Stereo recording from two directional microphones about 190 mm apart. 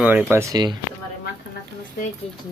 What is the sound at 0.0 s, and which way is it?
Speech, 10° right (ahead or behind).